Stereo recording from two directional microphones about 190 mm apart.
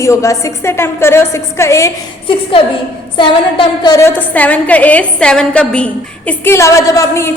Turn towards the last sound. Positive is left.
turn(degrees=15)  # may be behind; listen again after turning